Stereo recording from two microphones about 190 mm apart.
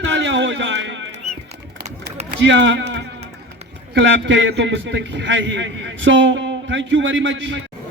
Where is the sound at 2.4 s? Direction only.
70° right (ahead or behind).